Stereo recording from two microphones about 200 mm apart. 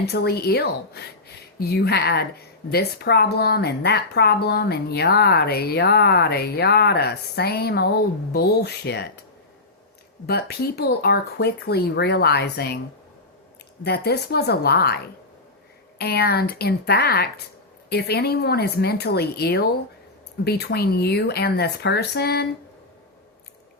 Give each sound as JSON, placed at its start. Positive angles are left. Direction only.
{"t": 0.0, "sound": "a woman's voice", "side_deg": 55}
{"t": 10.2, "sound": "a woman's voice", "side_deg": 50}
{"t": 13.8, "sound": "a woman's voice", "side_deg": 55}
{"t": 16.0, "sound": "a woman's voice", "side_deg": 50}